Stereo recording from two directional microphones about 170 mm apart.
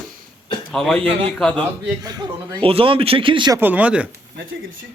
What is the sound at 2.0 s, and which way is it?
A man's voice, 25° right (ahead or behind).